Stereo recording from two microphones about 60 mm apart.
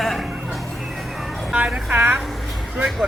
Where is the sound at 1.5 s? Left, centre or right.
Centre.